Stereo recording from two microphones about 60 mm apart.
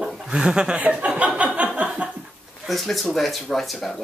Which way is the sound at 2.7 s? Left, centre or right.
Centre.